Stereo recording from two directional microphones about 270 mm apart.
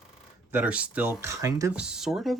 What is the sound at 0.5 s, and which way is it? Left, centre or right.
Speech, centre.